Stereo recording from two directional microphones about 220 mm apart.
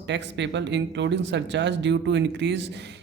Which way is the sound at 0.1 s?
55° right (ahead or behind).